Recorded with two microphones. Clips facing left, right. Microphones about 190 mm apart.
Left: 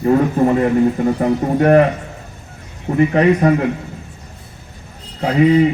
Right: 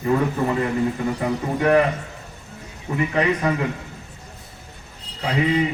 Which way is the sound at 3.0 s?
45° left (ahead or behind).